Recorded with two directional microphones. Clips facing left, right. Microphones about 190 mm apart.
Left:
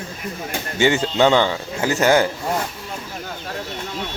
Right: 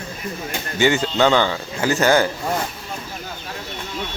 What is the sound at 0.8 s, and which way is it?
Speech, 25° left (ahead or behind).